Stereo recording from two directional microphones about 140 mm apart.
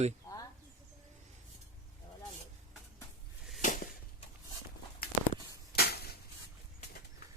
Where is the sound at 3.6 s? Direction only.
65° left (ahead or behind).